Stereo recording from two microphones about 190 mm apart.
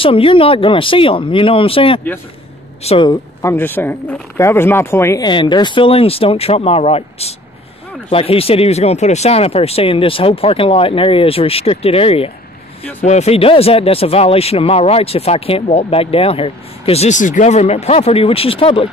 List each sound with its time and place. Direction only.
0.0 s speech: 30° left (ahead or behind)
3.1 s speech: 15° left (ahead or behind); by 18.9 s 30° left (ahead or behind)